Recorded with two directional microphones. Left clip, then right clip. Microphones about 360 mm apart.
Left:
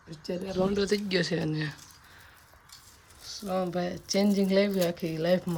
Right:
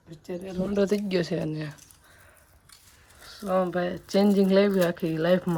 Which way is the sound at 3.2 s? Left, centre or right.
Centre.